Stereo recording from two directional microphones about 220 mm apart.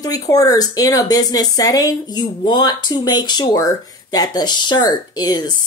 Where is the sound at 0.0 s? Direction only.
15° left (ahead or behind).